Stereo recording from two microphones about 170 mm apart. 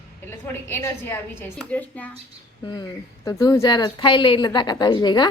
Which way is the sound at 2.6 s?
25° left (ahead or behind).